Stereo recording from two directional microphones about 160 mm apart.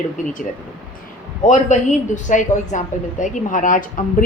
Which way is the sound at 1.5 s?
50° left (ahead or behind).